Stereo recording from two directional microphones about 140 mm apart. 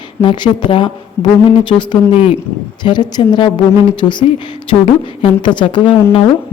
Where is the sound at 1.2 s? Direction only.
15° left (ahead or behind).